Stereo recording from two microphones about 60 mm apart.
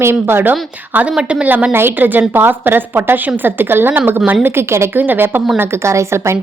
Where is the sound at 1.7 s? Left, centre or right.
Right.